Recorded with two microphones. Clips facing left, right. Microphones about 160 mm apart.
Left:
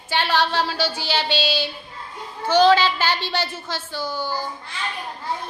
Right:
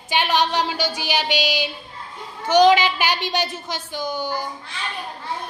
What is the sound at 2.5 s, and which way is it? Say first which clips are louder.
A woman's voice: right 1 dB; 15° right (ahead or behind).